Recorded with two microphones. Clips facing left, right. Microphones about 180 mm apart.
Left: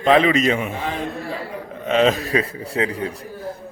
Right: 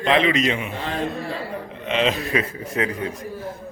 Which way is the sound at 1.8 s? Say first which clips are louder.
Left 5 dB; 45° left (ahead or behind).